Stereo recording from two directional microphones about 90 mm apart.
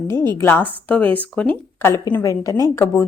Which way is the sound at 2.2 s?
35° left (ahead or behind).